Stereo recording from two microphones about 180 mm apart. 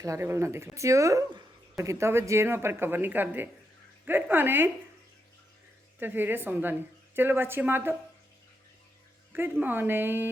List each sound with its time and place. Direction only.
0.0 s a woman's voice: 15° right (ahead or behind)
6.0 s a woman's voice: 10° right (ahead or behind)
9.3 s a woman's voice: 10° right (ahead or behind)